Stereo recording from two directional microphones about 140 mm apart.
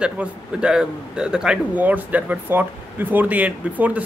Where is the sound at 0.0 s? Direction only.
5° right (ahead or behind).